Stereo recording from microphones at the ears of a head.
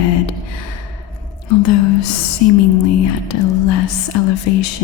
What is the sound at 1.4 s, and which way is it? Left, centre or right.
A woman's voice, left.